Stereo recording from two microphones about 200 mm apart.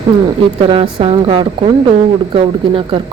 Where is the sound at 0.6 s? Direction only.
25° right (ahead or behind).